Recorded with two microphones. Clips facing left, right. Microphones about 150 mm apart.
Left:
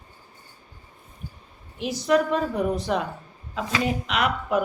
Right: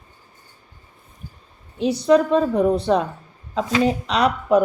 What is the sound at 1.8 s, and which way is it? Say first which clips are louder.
A woman's voice: right 6 dB; 30° right (ahead or behind).